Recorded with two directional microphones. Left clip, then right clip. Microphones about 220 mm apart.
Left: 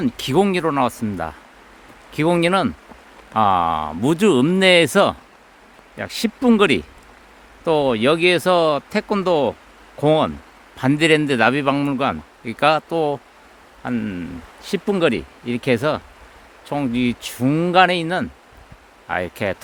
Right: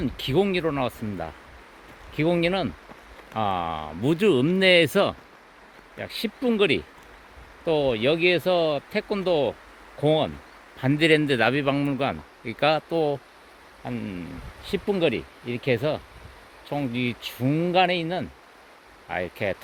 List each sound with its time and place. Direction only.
0.0 s a man's voice: 25° left (ahead or behind)
13.8 s a man's voice: 30° left (ahead or behind)